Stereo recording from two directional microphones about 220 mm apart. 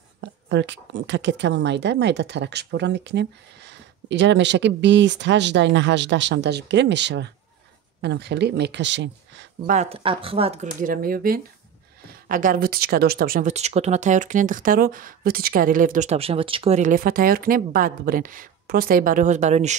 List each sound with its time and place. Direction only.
0.5 s speech: 55° right (ahead or behind)
9.7 s speech: 30° right (ahead or behind)